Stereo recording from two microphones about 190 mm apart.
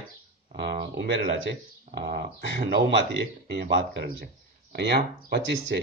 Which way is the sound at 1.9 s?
55° right (ahead or behind).